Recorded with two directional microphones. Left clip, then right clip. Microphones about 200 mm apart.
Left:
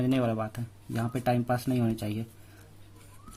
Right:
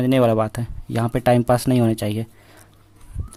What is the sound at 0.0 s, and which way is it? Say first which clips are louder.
Speech: right 12 dB; 40° right (ahead or behind).